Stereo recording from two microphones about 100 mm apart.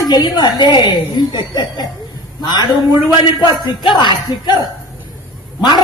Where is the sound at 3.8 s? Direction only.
50° left (ahead or behind).